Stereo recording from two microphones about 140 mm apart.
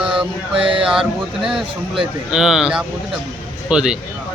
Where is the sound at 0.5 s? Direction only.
35° right (ahead or behind).